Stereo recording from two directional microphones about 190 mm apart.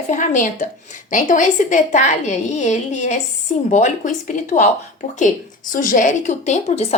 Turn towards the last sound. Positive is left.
turn(degrees=35)  # may be behind; listen again after turning